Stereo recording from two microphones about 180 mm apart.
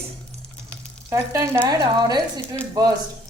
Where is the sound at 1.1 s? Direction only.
20° right (ahead or behind).